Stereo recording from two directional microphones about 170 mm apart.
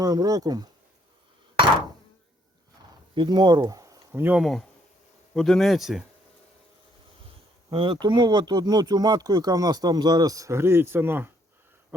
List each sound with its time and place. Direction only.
0.0 s speech: 20° right (ahead or behind)
3.2 s speech: 25° right (ahead or behind); by 6.1 s centre (ahead or behind)
7.7 s speech: 30° right (ahead or behind)